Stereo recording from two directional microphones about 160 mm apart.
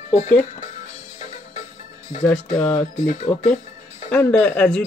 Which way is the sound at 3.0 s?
50° left (ahead or behind).